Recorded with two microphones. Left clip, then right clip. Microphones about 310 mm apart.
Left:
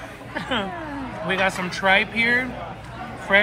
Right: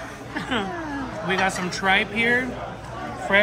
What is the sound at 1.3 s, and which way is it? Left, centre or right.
Speech, centre.